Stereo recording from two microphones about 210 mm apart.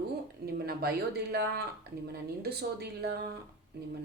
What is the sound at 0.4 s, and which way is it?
A woman's voice, 45° right (ahead or behind).